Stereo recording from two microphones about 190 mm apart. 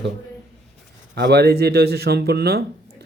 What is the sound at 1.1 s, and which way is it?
Speech, 65° right (ahead or behind).